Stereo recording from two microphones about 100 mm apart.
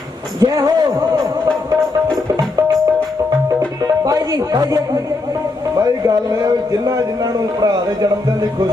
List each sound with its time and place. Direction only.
0.3 s speech: 40° right (ahead or behind)
3.8 s speech: 35° right (ahead or behind)